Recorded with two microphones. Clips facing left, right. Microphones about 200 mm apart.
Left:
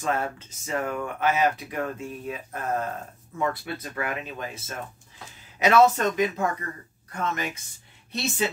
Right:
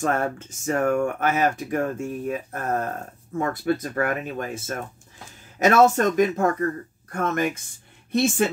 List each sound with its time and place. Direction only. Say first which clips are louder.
0.0 s speech: right 4 dB; 50° right (ahead or behind)